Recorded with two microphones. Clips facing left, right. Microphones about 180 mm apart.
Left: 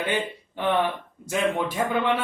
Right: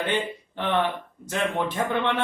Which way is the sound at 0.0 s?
10° left (ahead or behind).